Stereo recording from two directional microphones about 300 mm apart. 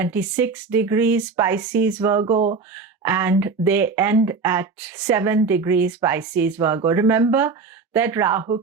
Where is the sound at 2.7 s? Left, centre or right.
Centre.